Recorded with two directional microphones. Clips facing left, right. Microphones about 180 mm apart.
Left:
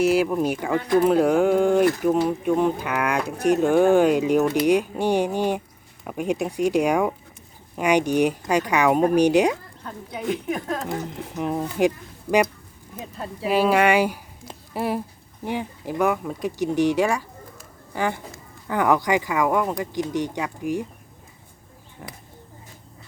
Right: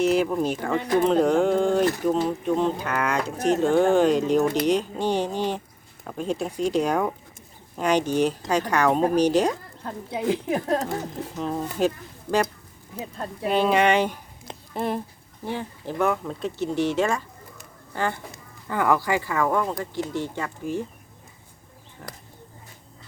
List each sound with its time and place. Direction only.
0.0 s speech: 10° left (ahead or behind)
9.8 s a woman's voice: 30° right (ahead or behind)
11.3 s speech: 15° left (ahead or behind)
13.1 s speech: 5° left (ahead or behind)